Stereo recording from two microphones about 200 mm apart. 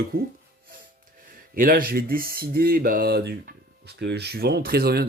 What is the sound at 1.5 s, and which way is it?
Speech, 45° right (ahead or behind).